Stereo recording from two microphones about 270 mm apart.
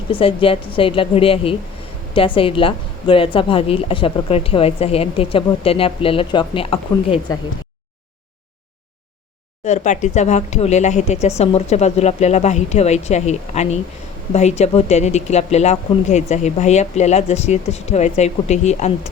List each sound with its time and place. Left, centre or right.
0.1 s a woman's voice: centre
9.6 s a woman's voice: left